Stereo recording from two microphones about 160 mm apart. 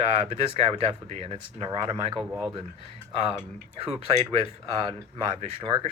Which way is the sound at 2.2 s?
5° right (ahead or behind).